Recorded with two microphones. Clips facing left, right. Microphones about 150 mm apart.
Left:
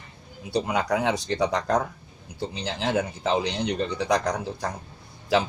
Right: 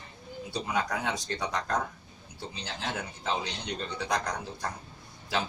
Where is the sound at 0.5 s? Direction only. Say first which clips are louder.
Left 7 dB; 70° left (ahead or behind).